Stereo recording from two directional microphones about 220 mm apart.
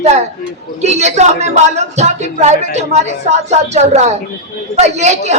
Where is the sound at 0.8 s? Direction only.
30° right (ahead or behind).